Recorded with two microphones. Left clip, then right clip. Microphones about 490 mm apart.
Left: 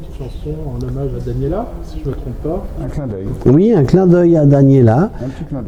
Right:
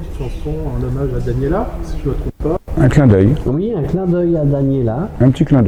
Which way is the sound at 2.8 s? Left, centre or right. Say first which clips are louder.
Right 13 dB; right.